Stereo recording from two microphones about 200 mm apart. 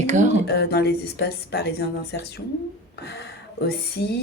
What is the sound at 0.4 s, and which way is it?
Speech, 55° left (ahead or behind).